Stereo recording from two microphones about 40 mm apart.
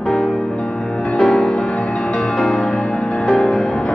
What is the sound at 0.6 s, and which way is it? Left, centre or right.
Music, left.